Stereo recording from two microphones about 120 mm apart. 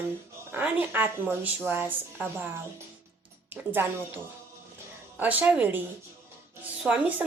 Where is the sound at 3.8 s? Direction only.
20° right (ahead or behind).